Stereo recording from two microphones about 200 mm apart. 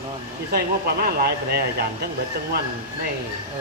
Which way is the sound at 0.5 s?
50° right (ahead or behind).